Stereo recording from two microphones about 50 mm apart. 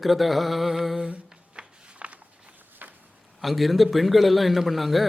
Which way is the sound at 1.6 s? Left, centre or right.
Right.